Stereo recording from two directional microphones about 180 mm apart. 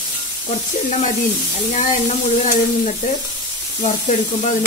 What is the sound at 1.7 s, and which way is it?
Speech, 40° left (ahead or behind).